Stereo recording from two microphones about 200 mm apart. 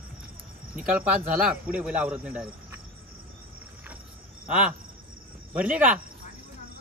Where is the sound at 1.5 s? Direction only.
5° right (ahead or behind).